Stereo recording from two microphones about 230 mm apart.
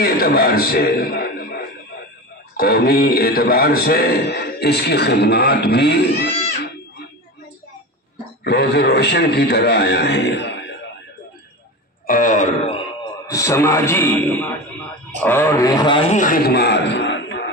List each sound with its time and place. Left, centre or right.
0.0 s a man's voice: left
8.5 s a man's voice: left
12.1 s speech: left
13.3 s a man's voice: centre; by 17.5 s left